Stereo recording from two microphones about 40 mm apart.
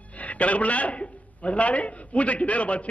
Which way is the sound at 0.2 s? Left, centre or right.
Left.